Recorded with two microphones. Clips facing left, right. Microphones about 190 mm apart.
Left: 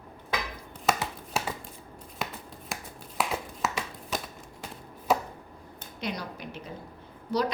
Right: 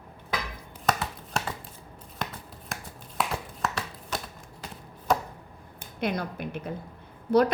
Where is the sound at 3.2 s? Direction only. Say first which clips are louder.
Even; centre (ahead or behind).